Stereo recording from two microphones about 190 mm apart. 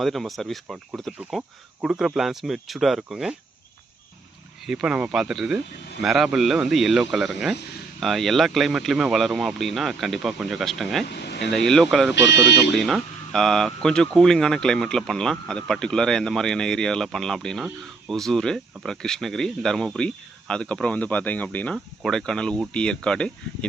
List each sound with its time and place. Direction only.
0.0 s speech: centre (ahead or behind)
4.6 s speech: 5° right (ahead or behind)
11.1 s speech: 60° left (ahead or behind)
11.5 s speech: centre (ahead or behind)
12.3 s speech: 65° left (ahead or behind)
12.7 s speech: centre (ahead or behind)